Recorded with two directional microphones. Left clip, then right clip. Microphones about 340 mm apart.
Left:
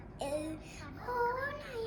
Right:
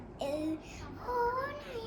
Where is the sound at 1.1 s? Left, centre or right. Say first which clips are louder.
Right 1 dB; centre.